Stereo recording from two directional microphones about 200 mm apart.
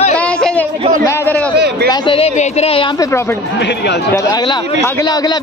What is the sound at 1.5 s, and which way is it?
Speech, 55° right (ahead or behind).